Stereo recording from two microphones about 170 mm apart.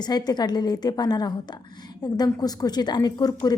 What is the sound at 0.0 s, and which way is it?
A woman's voice, 25° left (ahead or behind).